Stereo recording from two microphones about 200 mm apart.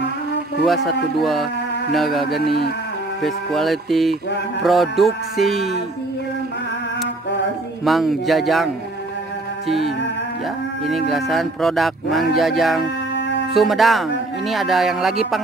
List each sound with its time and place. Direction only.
0.8 s music: centre (ahead or behind)
2.4 s speech: 55° left (ahead or behind)
3.2 s music: centre (ahead or behind)
7.8 s music: centre (ahead or behind)
10.9 s music: centre (ahead or behind)